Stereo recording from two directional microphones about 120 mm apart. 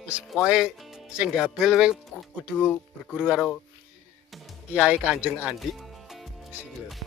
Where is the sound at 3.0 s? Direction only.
10° left (ahead or behind).